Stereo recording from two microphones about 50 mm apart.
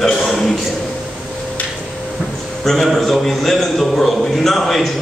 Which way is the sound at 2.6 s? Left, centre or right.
Centre.